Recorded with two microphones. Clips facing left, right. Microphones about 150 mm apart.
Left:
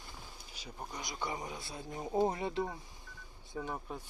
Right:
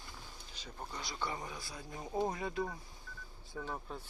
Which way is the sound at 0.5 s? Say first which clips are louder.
Left 1 dB; 10° left (ahead or behind).